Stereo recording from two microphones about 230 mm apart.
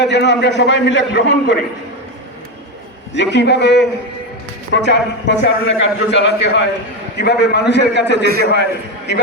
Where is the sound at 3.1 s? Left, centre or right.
Left.